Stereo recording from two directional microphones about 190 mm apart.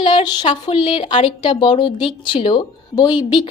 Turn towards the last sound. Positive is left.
turn(degrees=25)  # may be behind; listen again after turning